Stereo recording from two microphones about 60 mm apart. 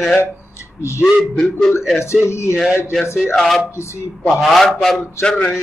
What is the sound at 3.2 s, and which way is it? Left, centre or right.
A man's voice, centre.